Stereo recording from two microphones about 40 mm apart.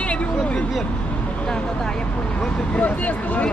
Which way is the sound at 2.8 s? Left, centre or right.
Left.